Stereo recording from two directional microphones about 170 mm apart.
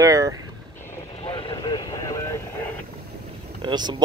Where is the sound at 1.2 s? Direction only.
30° left (ahead or behind).